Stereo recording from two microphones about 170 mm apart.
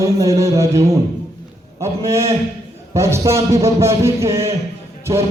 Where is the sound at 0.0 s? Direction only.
20° right (ahead or behind).